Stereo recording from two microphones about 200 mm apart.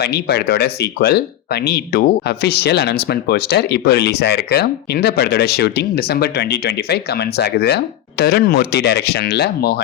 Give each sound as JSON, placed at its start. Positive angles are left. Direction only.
{"t": 0.0, "sound": "speech", "side_deg": 55}